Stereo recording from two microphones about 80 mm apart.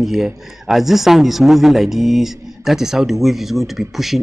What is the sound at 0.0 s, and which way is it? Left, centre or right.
A man's voice, centre.